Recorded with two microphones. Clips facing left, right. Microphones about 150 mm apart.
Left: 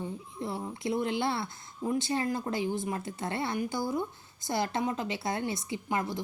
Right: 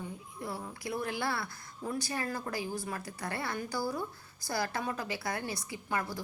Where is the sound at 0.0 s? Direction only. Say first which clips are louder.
Left 5 dB; 25° left (ahead or behind).